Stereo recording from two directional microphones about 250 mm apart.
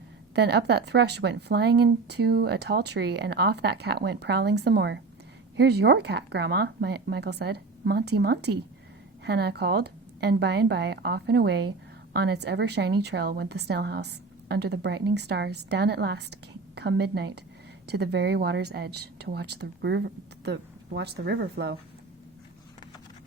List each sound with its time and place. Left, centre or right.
0.3 s a woman's voice: right